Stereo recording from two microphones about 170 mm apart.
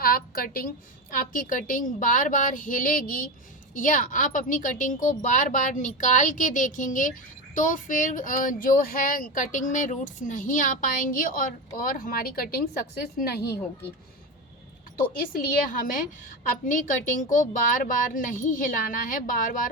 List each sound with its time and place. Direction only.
0.0 s a sound: 60° left (ahead or behind)
1.1 s a woman's voice: 55° left (ahead or behind); by 13.6 s 70° left (ahead or behind)
14.9 s speech: 55° left (ahead or behind)